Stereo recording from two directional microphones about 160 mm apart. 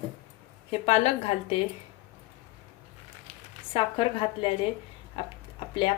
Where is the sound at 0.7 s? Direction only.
45° left (ahead or behind).